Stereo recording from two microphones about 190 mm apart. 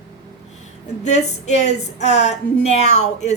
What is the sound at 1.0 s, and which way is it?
A woman's voice, 35° left (ahead or behind).